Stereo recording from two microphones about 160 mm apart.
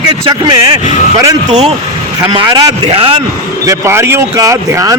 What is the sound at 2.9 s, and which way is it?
Speech, 35° right (ahead or behind).